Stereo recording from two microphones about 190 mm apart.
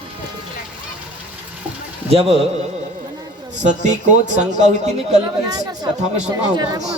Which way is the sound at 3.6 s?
40° right (ahead or behind).